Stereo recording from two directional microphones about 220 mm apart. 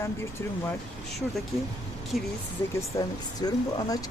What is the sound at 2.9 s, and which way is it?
Speech, 15° left (ahead or behind).